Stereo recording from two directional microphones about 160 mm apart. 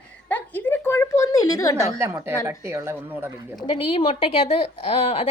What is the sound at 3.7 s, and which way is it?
Speech, 35° left (ahead or behind).